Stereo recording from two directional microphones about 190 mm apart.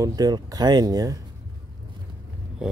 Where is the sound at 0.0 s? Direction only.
20° right (ahead or behind).